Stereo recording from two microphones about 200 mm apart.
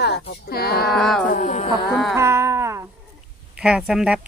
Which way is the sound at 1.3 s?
40° left (ahead or behind).